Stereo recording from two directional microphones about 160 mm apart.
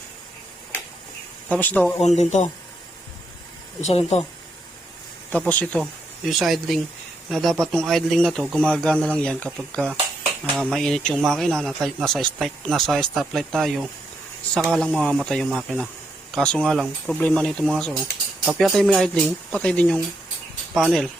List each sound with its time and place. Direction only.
1.5 s speech: 10° left (ahead or behind)
2.0 s speech: 45° left (ahead or behind)
3.8 s speech: 45° left (ahead or behind)
5.5 s speech: 10° left (ahead or behind)
5.8 s speech: centre (ahead or behind)